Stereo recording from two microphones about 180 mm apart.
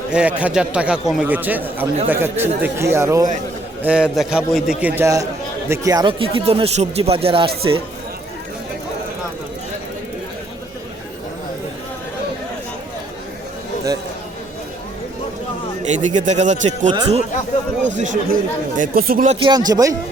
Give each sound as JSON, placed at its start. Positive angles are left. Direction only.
{"t": 0.1, "sound": "a man's voice", "side_deg": -5}
{"t": 15.8, "sound": "a man's voice", "side_deg": -40}
{"t": 19.3, "sound": "speech", "side_deg": -25}